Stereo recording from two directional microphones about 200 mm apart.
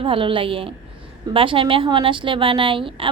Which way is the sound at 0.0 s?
25° right (ahead or behind).